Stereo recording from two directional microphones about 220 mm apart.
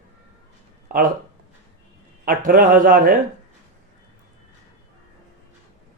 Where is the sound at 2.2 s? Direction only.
40° right (ahead or behind).